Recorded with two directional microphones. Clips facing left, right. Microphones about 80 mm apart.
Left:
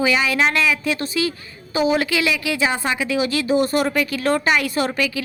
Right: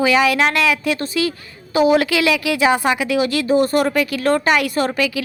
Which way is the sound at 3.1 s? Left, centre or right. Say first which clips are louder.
Right 1 dB; right.